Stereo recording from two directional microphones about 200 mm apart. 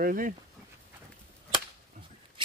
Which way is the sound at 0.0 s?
45° right (ahead or behind).